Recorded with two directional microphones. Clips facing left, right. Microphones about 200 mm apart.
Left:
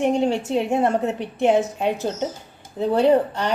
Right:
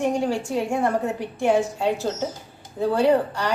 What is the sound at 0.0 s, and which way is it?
A woman's voice, 25° left (ahead or behind).